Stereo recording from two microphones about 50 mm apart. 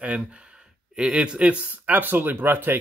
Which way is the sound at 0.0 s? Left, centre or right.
Right.